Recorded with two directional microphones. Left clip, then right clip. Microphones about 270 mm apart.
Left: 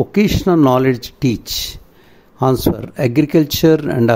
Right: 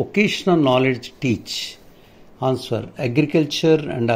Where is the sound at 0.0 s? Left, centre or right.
Left.